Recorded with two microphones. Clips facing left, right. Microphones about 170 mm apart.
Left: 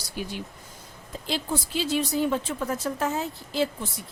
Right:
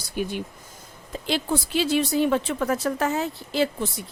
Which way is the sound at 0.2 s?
55° right (ahead or behind).